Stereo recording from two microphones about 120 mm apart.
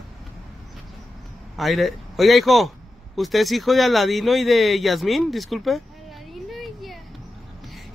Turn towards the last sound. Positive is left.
turn(degrees=0)  # may be behind; listen again after turning